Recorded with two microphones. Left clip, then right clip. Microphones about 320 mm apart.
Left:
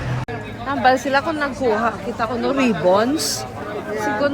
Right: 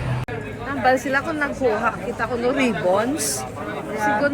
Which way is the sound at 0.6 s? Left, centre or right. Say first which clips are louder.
Left 3 dB; left.